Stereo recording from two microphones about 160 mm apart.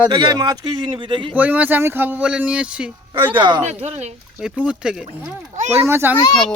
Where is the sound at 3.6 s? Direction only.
45° right (ahead or behind).